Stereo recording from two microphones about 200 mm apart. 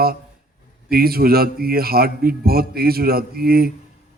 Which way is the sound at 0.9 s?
50° right (ahead or behind).